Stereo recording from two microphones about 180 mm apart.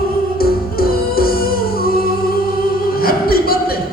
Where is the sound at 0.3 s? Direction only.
55° left (ahead or behind).